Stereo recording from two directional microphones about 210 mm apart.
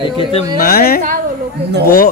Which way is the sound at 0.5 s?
45° left (ahead or behind).